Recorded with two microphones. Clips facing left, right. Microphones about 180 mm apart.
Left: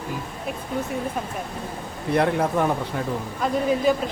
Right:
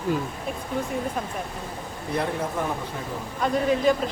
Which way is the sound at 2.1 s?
70° left (ahead or behind).